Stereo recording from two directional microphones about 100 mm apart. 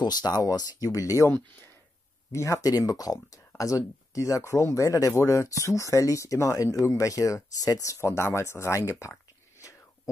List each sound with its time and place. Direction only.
0.0 s speech: 45° left (ahead or behind)
2.3 s speech: 35° left (ahead or behind)